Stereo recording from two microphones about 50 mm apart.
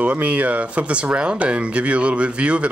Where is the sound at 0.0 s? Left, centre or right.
Right.